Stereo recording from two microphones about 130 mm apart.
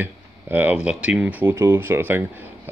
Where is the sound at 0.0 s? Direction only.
15° right (ahead or behind).